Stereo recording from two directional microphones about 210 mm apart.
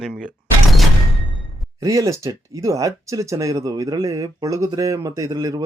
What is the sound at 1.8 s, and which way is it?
Speech, 15° right (ahead or behind).